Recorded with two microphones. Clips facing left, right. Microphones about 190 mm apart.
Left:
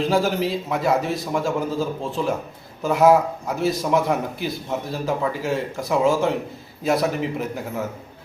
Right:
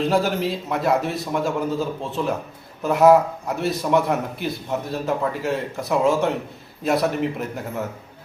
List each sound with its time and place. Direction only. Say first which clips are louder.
0.0 s a man's voice: even; centre (ahead or behind)